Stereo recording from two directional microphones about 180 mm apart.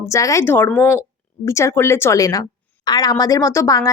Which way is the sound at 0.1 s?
15° left (ahead or behind).